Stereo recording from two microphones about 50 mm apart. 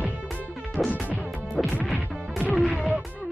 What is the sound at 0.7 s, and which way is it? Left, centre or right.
Music, centre.